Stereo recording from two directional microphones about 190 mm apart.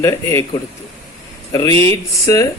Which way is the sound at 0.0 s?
15° left (ahead or behind).